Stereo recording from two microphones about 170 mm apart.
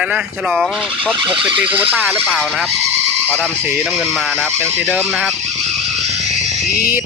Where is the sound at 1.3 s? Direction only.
30° right (ahead or behind).